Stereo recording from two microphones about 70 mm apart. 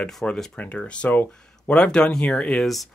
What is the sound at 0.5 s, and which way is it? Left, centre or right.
Speech, centre.